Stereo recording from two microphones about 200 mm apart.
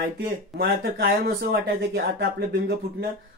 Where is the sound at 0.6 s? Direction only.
50° right (ahead or behind).